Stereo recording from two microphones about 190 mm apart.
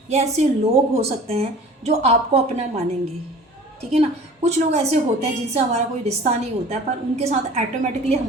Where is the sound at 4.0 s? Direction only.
35° right (ahead or behind).